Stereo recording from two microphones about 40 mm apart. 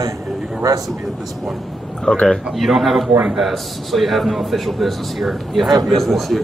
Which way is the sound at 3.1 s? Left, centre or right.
Centre.